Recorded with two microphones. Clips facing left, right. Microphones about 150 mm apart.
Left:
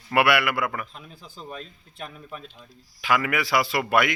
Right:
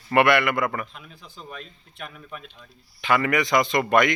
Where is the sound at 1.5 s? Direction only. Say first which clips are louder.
Left 2 dB; 35° left (ahead or behind).